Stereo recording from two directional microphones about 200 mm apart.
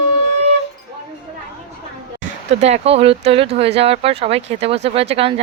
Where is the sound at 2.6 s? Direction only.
35° right (ahead or behind).